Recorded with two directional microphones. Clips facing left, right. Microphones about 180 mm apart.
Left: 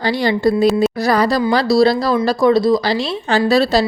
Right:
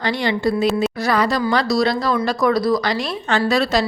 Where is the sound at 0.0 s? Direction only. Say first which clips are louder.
Left 4 dB; 35° left (ahead or behind).